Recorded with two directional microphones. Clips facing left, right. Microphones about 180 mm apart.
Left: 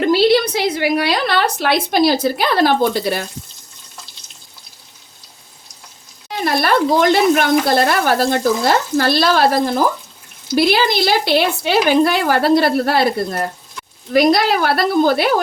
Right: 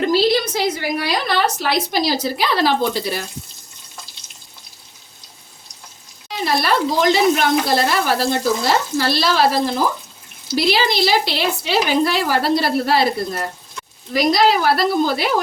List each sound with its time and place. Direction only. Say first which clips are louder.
0.1 s a woman's voice: left 4 dB; 65° left (ahead or behind)
6.2 s a woman's voice: left 2 dB; 55° left (ahead or behind)